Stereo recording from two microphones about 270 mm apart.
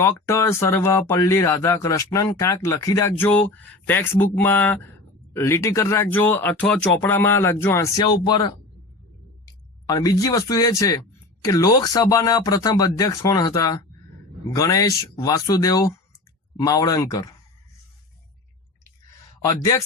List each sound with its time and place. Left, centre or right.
0.0 s speech: centre
19.5 s speech: centre